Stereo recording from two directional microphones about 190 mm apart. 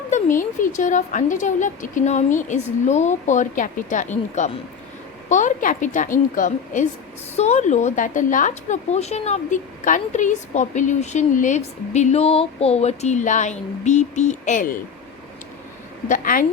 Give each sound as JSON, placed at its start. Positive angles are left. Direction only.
{"t": 0.1, "sound": "a woman's voice", "side_deg": 45}
{"t": 16.0, "sound": "a woman's voice", "side_deg": 45}